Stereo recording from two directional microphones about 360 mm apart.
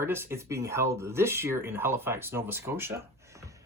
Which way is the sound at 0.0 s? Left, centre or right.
Centre.